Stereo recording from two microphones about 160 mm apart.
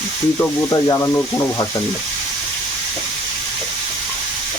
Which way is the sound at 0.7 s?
20° left (ahead or behind).